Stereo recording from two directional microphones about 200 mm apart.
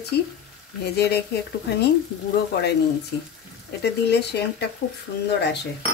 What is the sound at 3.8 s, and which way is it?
Speech, 55° left (ahead or behind).